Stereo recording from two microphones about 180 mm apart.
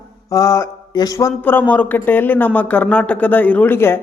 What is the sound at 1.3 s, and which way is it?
Speech, 10° left (ahead or behind).